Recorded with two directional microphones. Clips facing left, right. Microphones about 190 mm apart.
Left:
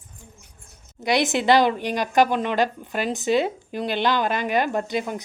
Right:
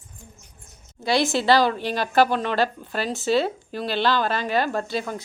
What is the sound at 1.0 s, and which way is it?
A woman's voice, 20° left (ahead or behind).